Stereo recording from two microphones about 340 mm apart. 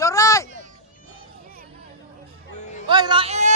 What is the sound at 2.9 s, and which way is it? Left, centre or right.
Speech, centre.